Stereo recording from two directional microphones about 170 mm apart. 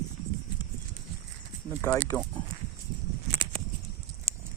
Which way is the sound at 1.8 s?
20° left (ahead or behind).